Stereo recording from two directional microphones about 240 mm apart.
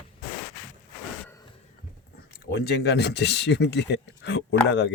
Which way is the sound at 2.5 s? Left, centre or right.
Left.